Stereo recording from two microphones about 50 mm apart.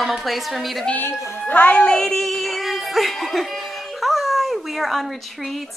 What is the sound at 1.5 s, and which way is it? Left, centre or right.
Speech, left.